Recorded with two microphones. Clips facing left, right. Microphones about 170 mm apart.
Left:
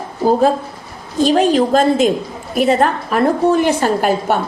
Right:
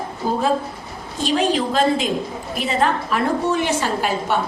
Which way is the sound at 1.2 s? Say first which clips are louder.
Left 7 dB; 45° left (ahead or behind).